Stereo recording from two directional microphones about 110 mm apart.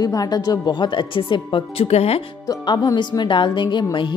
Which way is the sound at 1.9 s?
65° left (ahead or behind).